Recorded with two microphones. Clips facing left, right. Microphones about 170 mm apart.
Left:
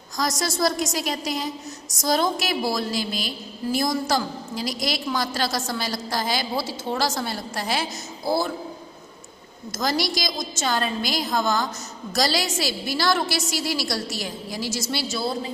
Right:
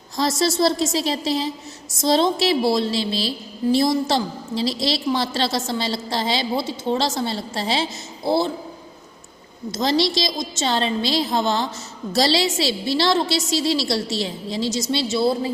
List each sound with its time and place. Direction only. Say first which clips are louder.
0.2 s a woman's voice: right 5 dB; 25° right (ahead or behind)
9.7 s a woman's voice: right 5 dB; 25° right (ahead or behind)